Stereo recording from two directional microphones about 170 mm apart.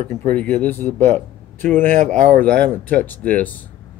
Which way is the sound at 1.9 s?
45° right (ahead or behind).